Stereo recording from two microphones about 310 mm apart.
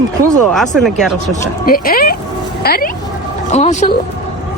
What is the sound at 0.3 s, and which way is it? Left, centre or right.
Speech, centre.